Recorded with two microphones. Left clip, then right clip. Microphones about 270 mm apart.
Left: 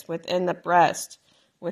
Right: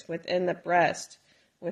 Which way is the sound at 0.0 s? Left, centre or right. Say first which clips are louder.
Left 3 dB; left.